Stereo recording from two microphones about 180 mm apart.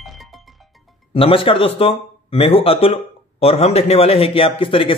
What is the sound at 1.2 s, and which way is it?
Speech, 30° left (ahead or behind).